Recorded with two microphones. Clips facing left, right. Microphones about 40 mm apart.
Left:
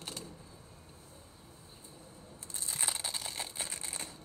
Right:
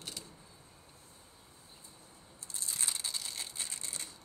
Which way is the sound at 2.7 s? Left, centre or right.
Left.